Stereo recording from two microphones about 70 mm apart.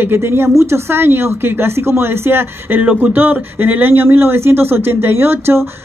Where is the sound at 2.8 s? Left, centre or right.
Centre.